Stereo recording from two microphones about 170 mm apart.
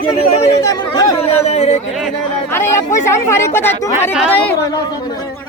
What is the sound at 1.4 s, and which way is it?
Speech, 40° left (ahead or behind).